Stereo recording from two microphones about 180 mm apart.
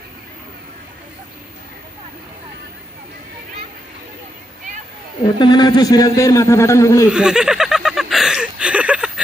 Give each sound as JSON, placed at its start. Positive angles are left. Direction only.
{"t": 5.4, "sound": "a man's voice", "side_deg": 25}
{"t": 7.1, "sound": "speech", "side_deg": -5}